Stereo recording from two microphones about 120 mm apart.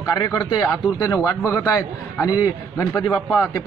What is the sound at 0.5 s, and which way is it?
A man's voice, 30° left (ahead or behind).